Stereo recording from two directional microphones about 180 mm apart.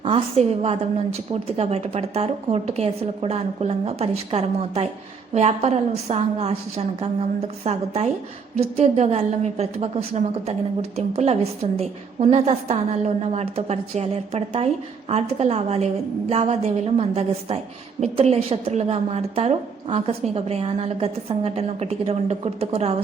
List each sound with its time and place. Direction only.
0.0 s a woman's voice: 35° right (ahead or behind)